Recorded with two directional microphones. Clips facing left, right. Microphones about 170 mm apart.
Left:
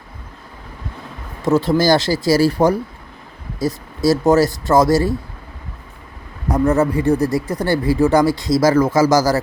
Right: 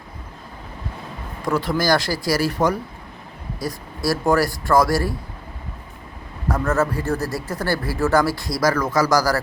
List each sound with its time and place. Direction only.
1.5 s speech: 25° left (ahead or behind)
6.5 s speech: 15° left (ahead or behind)